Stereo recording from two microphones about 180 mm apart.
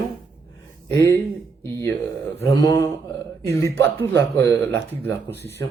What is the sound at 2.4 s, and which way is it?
Speech, 15° left (ahead or behind).